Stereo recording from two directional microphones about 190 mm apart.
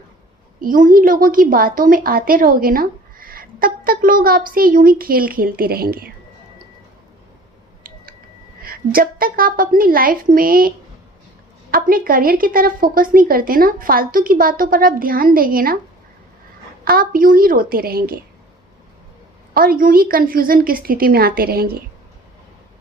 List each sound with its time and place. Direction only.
0.6 s a woman's voice: 45° right (ahead or behind)
8.6 s a woman's voice: 50° right (ahead or behind)
11.7 s a woman's voice: 50° right (ahead or behind)
16.8 s a woman's voice: 50° right (ahead or behind)
19.5 s a woman's voice: 50° right (ahead or behind)